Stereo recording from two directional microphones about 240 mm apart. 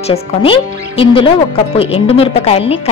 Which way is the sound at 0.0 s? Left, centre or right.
Left.